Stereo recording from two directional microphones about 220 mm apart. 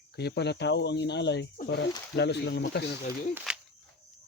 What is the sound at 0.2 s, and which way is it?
Speech, 50° left (ahead or behind).